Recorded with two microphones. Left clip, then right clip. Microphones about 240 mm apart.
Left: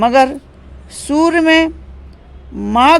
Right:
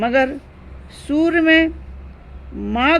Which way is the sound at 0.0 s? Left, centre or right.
Left.